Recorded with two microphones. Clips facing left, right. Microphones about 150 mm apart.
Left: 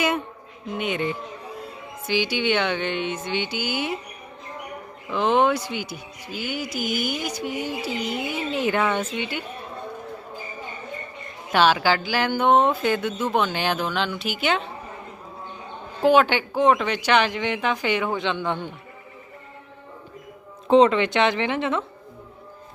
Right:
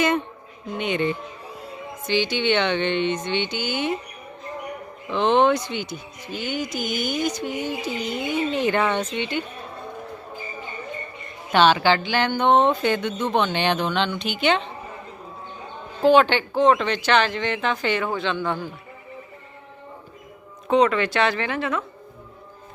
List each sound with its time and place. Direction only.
0.8 s a woman's voice: 5° left (ahead or behind)
5.0 s speech: 5° left (ahead or behind)
11.5 s a woman's voice: 5° left (ahead or behind)
16.0 s speech: 10° left (ahead or behind)
20.7 s speech: 30° left (ahead or behind)